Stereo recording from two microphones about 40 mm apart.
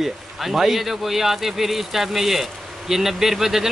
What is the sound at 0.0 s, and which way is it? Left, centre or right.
A man's voice, centre.